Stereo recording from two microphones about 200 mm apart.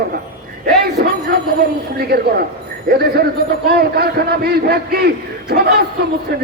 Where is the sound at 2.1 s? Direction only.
50° right (ahead or behind).